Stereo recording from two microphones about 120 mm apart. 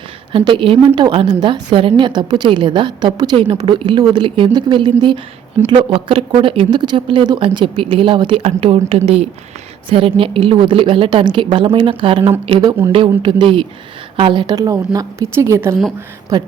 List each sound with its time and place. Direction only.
0.3 s a woman's voice: 45° right (ahead or behind)
5.6 s a woman's voice: 20° right (ahead or behind)
5.9 s a woman's voice: 45° right (ahead or behind); by 15.8 s 20° right (ahead or behind)